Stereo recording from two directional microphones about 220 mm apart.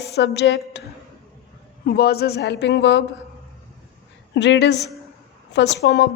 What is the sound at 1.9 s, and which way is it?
Speech, 45° left (ahead or behind).